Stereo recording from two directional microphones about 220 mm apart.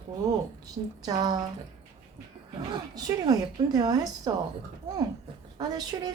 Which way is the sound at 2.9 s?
15° right (ahead or behind).